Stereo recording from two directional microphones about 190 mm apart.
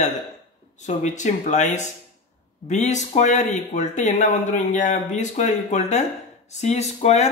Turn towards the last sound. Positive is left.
turn(degrees=35)  # may be behind; listen again after turning